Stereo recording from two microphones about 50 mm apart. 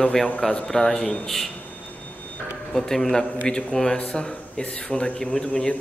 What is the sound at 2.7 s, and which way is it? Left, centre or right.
A man's voice, centre.